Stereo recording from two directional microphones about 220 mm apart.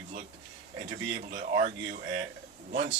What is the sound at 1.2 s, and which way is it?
Speech, 40° right (ahead or behind).